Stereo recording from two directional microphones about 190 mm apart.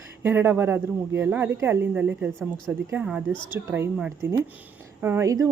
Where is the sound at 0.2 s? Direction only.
10° right (ahead or behind).